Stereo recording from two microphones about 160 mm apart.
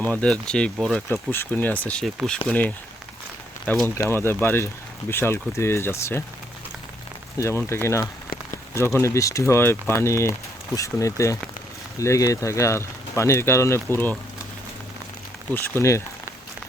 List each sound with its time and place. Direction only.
0.0 s speech: 10° left (ahead or behind)
3.8 s speech: 15° left (ahead or behind)
7.3 s speech: 15° left (ahead or behind)
15.5 s speech: 15° left (ahead or behind)